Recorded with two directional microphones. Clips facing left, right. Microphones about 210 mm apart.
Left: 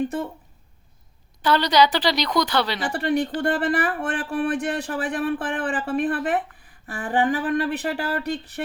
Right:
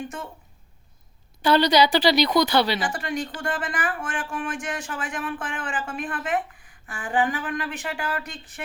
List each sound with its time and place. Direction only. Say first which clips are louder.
1.4 s a woman's voice: even; 10° right (ahead or behind)
2.8 s speech: left 6 dB; 35° left (ahead or behind)